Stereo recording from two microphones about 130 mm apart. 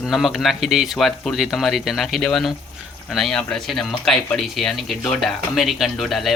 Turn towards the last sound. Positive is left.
turn(degrees=0)  # may be behind; listen again after turning